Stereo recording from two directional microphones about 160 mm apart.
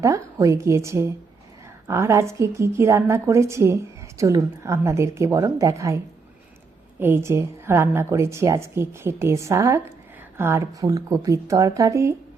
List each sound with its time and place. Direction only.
0.0 s a woman's voice: 20° right (ahead or behind)
7.0 s a woman's voice: 15° right (ahead or behind)